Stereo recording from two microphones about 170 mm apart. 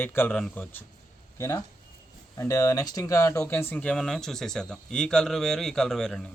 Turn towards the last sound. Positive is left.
turn(degrees=5)  # may be behind; listen again after turning